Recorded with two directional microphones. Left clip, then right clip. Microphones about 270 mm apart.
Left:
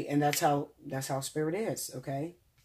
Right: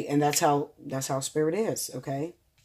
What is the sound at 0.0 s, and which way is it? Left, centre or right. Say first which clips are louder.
Speech: right 4 dB; right.